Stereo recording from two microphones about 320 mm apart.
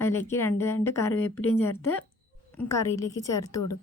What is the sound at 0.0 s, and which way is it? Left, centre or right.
Speech, centre.